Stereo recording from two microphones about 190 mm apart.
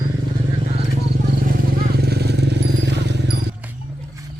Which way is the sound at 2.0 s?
60° right (ahead or behind).